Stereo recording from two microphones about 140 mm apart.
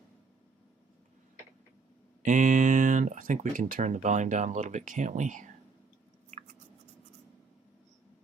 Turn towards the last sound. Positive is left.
turn(degrees=-50)  # may be behind; listen again after turning